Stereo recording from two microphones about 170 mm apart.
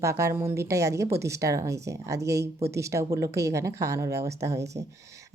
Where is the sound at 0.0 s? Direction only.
15° right (ahead or behind).